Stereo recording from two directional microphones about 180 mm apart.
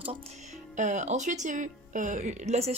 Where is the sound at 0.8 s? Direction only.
45° right (ahead or behind).